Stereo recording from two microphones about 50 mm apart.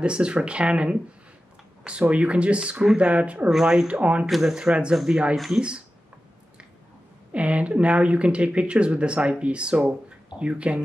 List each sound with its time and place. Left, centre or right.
0.0 s speech: right
3.4 s speech: centre; by 4.3 s right
4.3 s speech: centre
4.6 s speech: centre
7.3 s speech: right